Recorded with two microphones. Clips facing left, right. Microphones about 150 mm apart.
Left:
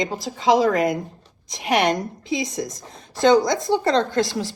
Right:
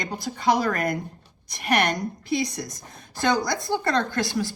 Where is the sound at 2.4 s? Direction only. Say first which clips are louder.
Left 2 dB; 20° left (ahead or behind).